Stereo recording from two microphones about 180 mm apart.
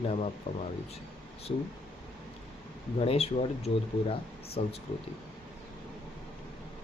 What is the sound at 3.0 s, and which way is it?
Speech, 35° left (ahead or behind).